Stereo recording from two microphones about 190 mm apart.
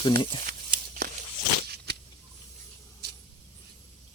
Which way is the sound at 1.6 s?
60° right (ahead or behind).